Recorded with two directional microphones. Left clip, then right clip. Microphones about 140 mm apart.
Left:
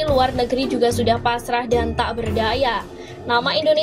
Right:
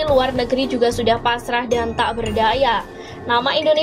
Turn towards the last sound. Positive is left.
turn(degrees=-35)  # may be behind; listen again after turning